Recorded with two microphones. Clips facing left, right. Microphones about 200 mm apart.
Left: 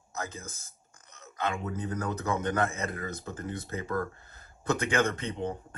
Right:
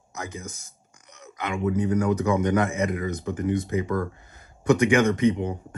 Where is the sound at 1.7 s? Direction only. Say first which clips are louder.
Right 10 dB; 15° right (ahead or behind).